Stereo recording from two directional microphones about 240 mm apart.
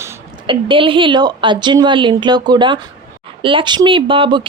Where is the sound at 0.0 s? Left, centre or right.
Right.